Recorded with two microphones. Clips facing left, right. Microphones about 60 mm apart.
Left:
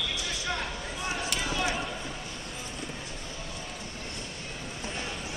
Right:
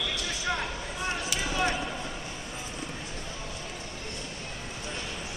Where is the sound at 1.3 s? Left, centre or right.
Centre.